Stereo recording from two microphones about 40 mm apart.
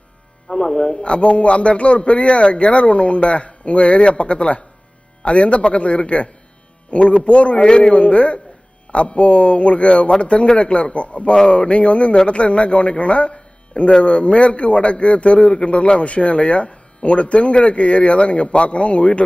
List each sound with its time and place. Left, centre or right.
0.4 s a man's voice: centre